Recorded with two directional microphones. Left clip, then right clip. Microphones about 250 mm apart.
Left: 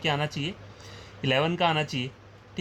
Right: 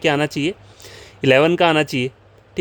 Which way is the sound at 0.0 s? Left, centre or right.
Right.